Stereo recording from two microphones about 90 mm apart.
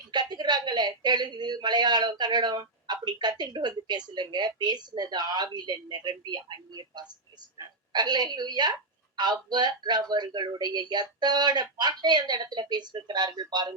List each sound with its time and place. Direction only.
0.1 s a woman's voice: 50° right (ahead or behind)